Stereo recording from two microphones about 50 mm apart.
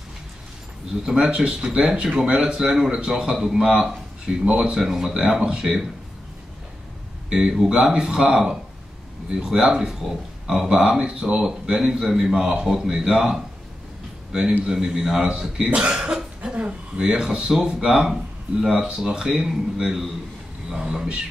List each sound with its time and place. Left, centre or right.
1.0 s speech: centre
7.2 s speech: centre
14.7 s speech: centre
17.8 s speech: centre